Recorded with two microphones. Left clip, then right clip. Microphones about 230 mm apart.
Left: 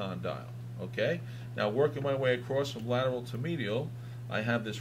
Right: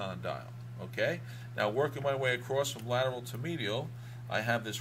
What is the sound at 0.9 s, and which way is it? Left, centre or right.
Speech, right.